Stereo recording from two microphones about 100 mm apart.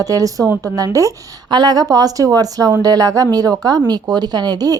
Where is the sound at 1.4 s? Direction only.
45° right (ahead or behind).